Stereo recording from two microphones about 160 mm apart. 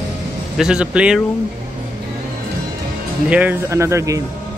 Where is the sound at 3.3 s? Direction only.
10° right (ahead or behind).